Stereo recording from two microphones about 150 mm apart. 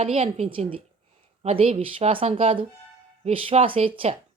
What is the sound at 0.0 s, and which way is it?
Speech, 40° right (ahead or behind).